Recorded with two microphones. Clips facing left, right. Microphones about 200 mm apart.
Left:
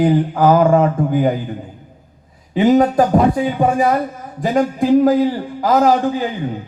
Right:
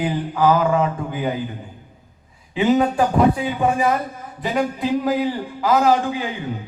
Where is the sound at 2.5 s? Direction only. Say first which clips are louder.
Left 5 dB; 40° left (ahead or behind).